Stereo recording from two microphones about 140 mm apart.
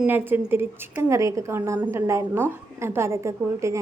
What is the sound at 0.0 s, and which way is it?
A woman's voice, 15° right (ahead or behind).